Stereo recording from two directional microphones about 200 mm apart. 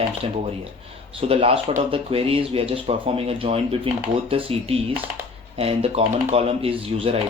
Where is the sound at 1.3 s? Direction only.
30° right (ahead or behind).